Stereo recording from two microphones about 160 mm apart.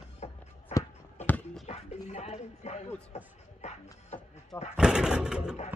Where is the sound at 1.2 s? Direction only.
10° left (ahead or behind).